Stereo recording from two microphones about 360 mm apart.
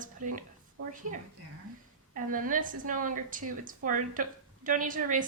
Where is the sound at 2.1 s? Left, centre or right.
Right.